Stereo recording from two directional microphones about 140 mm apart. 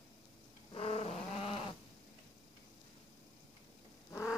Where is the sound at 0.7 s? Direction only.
45° left (ahead or behind).